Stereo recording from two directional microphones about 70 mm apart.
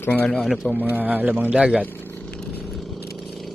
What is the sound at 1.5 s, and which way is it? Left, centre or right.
Speech, centre.